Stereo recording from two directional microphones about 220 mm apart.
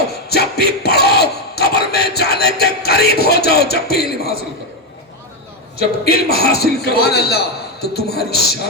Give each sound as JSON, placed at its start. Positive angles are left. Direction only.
{"t": 0.3, "sound": "battle cry", "side_deg": 45}
{"t": 6.1, "sound": "a man's voice", "side_deg": 45}